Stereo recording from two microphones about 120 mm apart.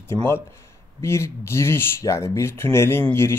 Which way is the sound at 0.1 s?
20° left (ahead or behind).